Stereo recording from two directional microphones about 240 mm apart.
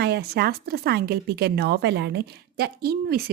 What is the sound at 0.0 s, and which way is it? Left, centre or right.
A woman's voice, right.